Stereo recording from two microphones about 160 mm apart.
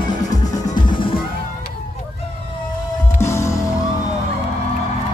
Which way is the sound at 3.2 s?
20° left (ahead or behind).